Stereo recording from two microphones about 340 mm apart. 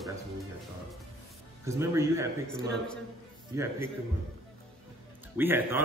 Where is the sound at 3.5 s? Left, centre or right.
Centre.